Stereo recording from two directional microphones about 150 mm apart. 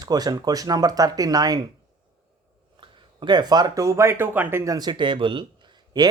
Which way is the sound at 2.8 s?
30° right (ahead or behind).